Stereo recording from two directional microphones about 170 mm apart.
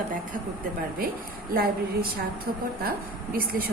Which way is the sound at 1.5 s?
60° right (ahead or behind).